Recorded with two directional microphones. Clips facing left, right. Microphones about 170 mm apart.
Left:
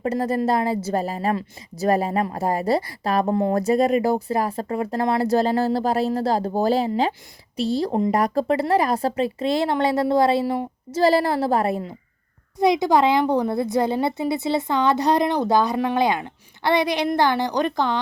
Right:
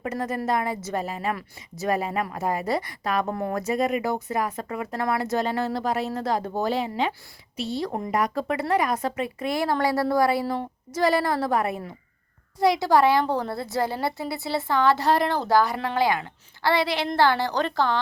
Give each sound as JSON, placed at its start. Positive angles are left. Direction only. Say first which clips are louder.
{"t": 0.0, "sound": "a woman's voice", "louder": "left 6 dB", "side_deg": 30}
{"t": 10.4, "sound": "a woman's voice", "louder": "left 4 dB", "side_deg": 15}
{"t": 10.9, "sound": "a woman's voice", "louder": "left 4 dB", "side_deg": 30}